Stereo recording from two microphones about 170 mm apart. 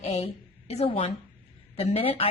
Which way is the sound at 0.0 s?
40° left (ahead or behind).